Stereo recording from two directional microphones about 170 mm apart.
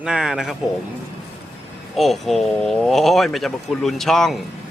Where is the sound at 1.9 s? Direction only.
Centre (ahead or behind).